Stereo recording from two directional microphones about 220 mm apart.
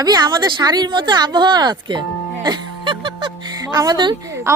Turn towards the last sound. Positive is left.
turn(degrees=-15)  # may be behind; listen again after turning